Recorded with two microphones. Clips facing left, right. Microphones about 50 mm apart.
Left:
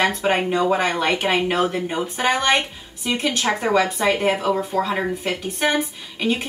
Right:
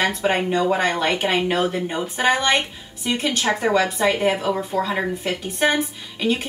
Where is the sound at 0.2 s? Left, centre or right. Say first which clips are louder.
Even; centre.